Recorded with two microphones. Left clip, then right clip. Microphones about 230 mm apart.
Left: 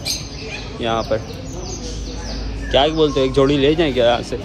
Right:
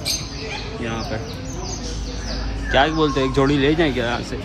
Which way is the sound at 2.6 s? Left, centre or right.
Centre.